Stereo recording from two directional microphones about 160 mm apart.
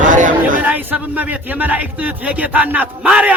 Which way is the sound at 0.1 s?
55° right (ahead or behind).